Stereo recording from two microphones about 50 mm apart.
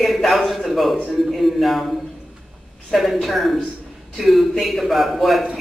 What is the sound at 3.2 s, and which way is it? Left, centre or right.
A man's voice, centre.